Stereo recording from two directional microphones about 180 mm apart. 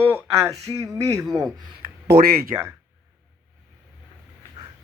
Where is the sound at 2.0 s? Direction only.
60° right (ahead or behind).